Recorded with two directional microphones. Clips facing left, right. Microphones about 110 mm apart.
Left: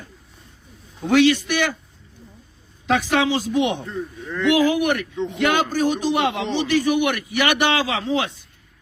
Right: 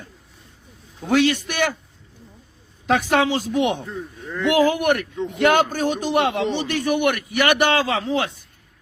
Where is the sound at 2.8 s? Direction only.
45° right (ahead or behind).